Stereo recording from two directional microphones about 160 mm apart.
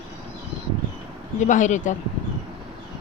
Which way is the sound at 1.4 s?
50° left (ahead or behind).